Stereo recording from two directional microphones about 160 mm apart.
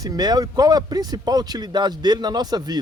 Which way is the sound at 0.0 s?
25° right (ahead or behind).